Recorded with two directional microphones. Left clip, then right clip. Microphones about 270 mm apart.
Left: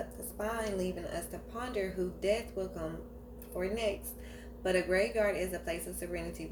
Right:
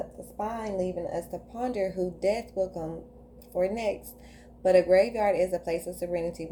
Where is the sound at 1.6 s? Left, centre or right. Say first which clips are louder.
Right 6 dB; right.